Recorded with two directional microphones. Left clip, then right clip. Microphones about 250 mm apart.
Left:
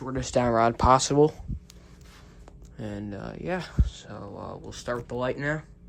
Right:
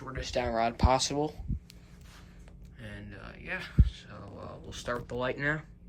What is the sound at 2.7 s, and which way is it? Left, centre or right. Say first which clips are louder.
Speech: left 10 dB; centre.